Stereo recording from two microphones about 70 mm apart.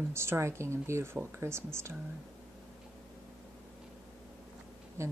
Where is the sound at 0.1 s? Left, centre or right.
Right.